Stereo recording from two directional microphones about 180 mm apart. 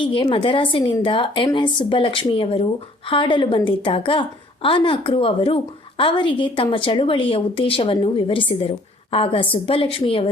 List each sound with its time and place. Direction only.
0.0 s a woman's voice: 30° left (ahead or behind)